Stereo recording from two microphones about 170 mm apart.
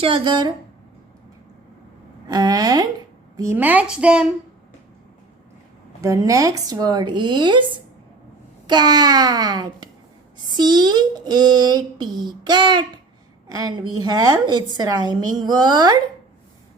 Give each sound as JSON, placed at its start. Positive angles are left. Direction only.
{"t": 0.0, "sound": "speech", "side_deg": -30}
{"t": 2.2, "sound": "a woman's voice", "side_deg": -20}
{"t": 6.0, "sound": "speech", "side_deg": -20}